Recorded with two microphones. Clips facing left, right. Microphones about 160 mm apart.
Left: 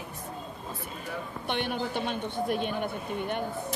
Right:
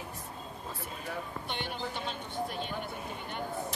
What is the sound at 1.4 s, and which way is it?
A man's voice, 60° left (ahead or behind).